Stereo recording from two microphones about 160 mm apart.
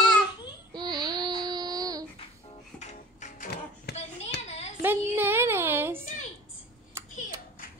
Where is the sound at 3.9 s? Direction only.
90° left.